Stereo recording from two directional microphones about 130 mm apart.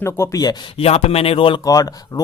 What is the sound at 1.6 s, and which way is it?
Speech, 30° left (ahead or behind).